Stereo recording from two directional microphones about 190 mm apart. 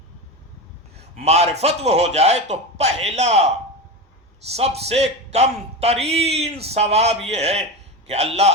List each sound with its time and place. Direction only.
1.2 s a man's voice: 35° right (ahead or behind)
4.5 s a man's voice: 35° right (ahead or behind)